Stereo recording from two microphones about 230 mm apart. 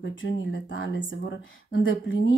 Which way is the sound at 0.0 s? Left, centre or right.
Left.